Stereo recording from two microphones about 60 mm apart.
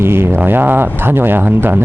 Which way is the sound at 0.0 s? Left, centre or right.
Right.